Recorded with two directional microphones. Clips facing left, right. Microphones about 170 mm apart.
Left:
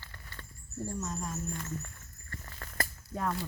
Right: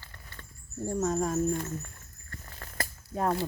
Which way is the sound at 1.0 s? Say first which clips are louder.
Right 15 dB; 60° right (ahead or behind).